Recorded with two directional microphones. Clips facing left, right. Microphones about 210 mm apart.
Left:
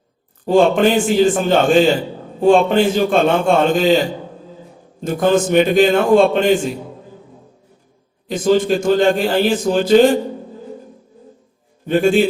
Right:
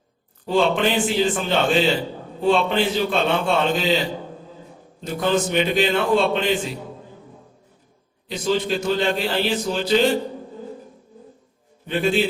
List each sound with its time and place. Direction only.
0.4 s a man's voice: 45° left (ahead or behind)
8.3 s a man's voice: 50° left (ahead or behind)
11.9 s a man's voice: 45° left (ahead or behind)